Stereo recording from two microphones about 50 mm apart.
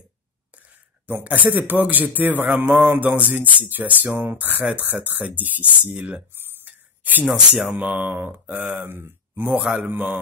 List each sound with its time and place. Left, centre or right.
1.2 s music: right
3.0 s music: right
6.6 s a sound: right
7.2 s speech: centre
8.0 s mantra: right
9.6 s a man's voice: centre
9.8 s music: right